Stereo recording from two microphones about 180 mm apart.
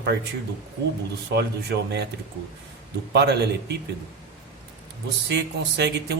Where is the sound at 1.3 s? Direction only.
65° right (ahead or behind).